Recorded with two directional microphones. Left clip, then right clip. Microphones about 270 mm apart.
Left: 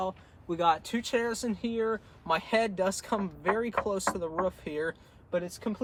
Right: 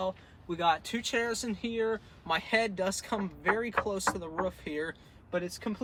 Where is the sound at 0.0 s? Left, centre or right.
Centre.